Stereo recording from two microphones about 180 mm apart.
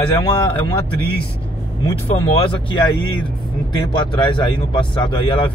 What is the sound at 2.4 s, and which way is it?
Speech, 30° left (ahead or behind).